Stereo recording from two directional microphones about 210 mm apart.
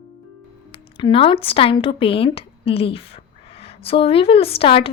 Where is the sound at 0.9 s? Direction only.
25° left (ahead or behind).